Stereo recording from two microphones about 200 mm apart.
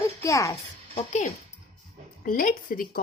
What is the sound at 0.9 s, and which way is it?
A woman's voice, 35° left (ahead or behind).